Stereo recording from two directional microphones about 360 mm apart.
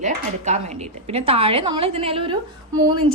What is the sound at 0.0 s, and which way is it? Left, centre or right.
Speech, centre.